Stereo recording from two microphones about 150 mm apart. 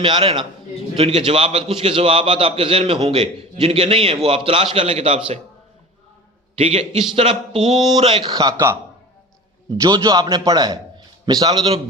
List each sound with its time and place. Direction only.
0.0 s a man's voice: 35° right (ahead or behind)
6.6 s a man's voice: 40° right (ahead or behind); by 8.8 s 20° right (ahead or behind)
9.8 s a man's voice: 25° right (ahead or behind)